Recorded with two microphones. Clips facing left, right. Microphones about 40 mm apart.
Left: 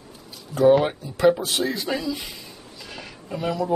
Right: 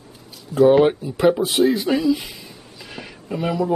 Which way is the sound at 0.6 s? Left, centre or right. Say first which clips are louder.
Right 4 dB; centre.